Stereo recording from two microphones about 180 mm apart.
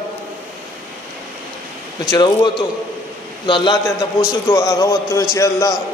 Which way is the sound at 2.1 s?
25° left (ahead or behind).